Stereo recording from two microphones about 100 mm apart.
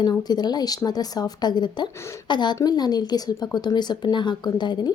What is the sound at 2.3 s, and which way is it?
Speech, 50° left (ahead or behind).